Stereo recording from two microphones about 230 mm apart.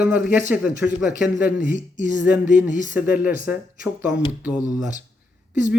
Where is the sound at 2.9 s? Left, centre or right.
Centre.